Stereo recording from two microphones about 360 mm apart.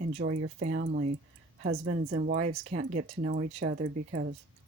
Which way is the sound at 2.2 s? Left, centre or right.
Right.